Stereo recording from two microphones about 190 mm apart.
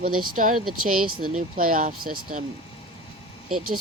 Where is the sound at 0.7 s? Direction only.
Centre (ahead or behind).